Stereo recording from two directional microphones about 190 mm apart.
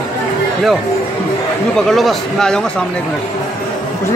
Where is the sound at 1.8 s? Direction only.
Centre (ahead or behind).